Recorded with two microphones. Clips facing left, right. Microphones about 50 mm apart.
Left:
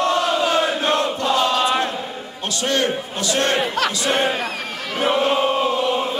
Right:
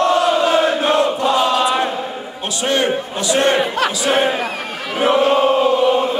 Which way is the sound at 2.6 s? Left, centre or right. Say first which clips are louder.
Right 3 dB; centre.